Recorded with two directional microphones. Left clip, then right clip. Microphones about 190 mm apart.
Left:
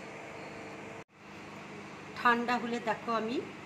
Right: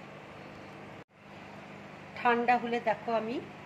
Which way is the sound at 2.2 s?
30° right (ahead or behind).